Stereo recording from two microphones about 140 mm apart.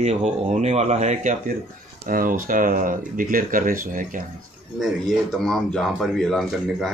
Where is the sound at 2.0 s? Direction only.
80° right.